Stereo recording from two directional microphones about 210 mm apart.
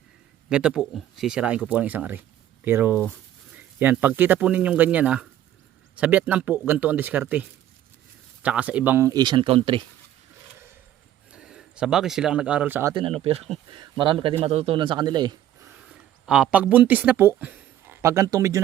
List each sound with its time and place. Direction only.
0.5 s speech: 5° right (ahead or behind); by 9.8 s 25° right (ahead or behind)
11.3 s speech: 5° right (ahead or behind)
12.9 s a man's voice: 25° right (ahead or behind)
15.9 s speech: 5° right (ahead or behind)